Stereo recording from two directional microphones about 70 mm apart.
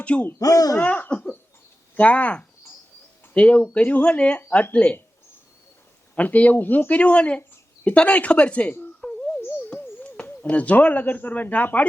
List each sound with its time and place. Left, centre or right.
0.0 s speech: centre
0.3 s speech: left
0.8 s speech: left
6.1 s speech: left
9.0 s a sound: centre
9.4 s a sound: left
10.0 s speech: centre